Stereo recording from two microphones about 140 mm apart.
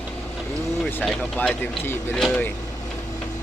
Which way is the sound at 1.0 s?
5° left (ahead or behind).